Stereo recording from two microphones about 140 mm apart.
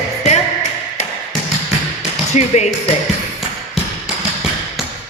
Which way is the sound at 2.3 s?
55° left (ahead or behind).